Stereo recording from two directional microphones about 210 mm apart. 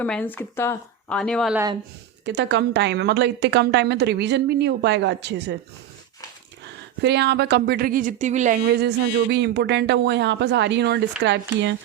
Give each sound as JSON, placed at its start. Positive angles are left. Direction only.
{"t": 0.0, "sound": "speech", "side_deg": 5}
{"t": 2.2, "sound": "a woman's voice", "side_deg": -55}
{"t": 7.0, "sound": "a woman's voice", "side_deg": -55}
{"t": 8.8, "sound": "a woman's voice", "side_deg": -55}